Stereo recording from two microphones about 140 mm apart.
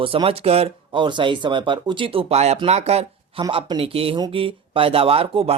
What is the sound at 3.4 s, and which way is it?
Speech, 35° right (ahead or behind).